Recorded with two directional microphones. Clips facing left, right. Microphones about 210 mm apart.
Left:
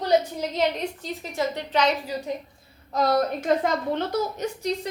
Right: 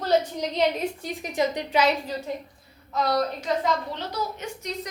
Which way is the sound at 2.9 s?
45° left (ahead or behind).